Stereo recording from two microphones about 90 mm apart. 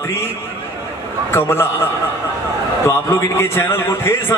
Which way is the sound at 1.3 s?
25° left (ahead or behind).